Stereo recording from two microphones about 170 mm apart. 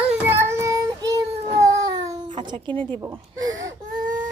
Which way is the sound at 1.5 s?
20° right (ahead or behind).